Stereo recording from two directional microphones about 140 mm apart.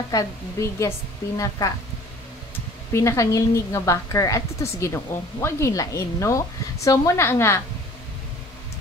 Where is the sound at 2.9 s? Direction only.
20° left (ahead or behind).